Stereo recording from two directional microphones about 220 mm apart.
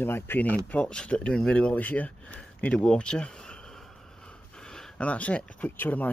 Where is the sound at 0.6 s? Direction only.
5° left (ahead or behind).